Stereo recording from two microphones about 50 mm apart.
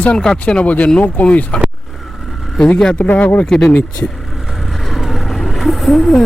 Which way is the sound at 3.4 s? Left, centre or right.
Centre.